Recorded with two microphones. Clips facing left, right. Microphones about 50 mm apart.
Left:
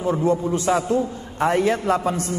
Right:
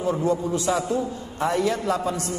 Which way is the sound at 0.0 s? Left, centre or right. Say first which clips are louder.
Left 3 dB; left.